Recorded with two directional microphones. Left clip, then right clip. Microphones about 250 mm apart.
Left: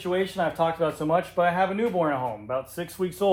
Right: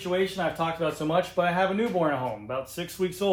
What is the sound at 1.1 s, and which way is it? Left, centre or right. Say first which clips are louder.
Speech: left 1 dB; centre.